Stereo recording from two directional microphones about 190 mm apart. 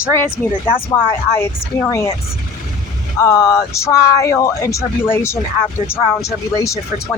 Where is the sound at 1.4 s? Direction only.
15° left (ahead or behind).